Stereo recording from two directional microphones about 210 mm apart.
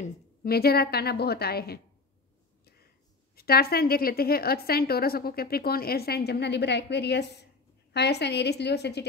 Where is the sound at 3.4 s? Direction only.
45° left (ahead or behind).